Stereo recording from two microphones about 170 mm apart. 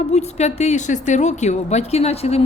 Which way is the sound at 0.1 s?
40° left (ahead or behind).